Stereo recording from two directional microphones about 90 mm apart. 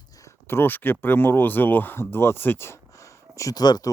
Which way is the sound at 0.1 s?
35° left (ahead or behind).